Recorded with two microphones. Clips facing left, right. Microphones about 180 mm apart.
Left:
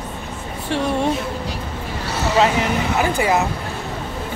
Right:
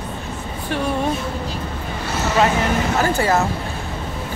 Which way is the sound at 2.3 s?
15° left (ahead or behind).